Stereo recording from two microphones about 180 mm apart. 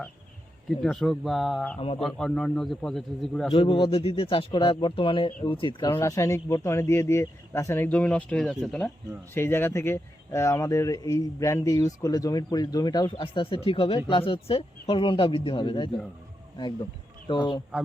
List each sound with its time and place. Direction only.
0.8 s a man's voice: 5° left (ahead or behind)
3.5 s speech: 30° left (ahead or behind)
5.9 s speech: 15° left (ahead or behind)
17.2 s speech: 25° left (ahead or behind)